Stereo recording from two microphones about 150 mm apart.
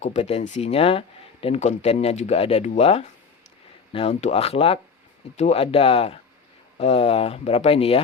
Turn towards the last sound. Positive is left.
turn(degrees=40)  # may be behind; listen again after turning